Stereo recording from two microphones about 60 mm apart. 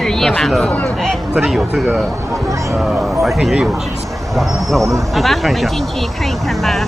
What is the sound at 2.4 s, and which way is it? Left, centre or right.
Speech, right.